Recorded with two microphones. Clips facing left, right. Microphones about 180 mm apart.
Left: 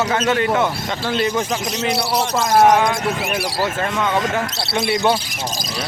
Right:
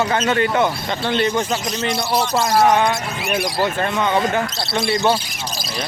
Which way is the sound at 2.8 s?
Centre (ahead or behind).